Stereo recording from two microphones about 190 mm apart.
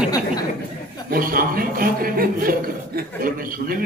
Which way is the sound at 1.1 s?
50° right (ahead or behind).